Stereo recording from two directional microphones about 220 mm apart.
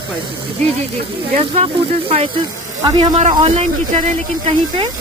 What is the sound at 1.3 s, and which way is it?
Speech, 30° right (ahead or behind).